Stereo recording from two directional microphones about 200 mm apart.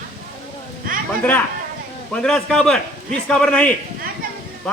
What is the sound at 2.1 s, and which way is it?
A man's voice, 5° left (ahead or behind).